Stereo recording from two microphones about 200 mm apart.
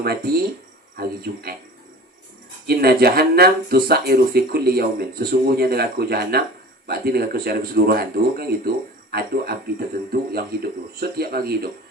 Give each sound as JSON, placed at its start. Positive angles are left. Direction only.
{"t": 0.0, "sound": "speech", "side_deg": -50}
{"t": 2.6, "sound": "speech", "side_deg": -50}